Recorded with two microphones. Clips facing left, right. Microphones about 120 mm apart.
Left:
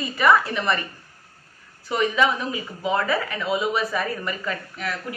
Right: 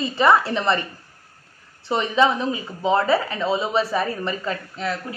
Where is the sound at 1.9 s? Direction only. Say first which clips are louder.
Right 2 dB; 30° right (ahead or behind).